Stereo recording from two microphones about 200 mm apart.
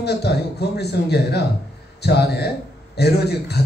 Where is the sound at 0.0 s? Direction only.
55° left (ahead or behind).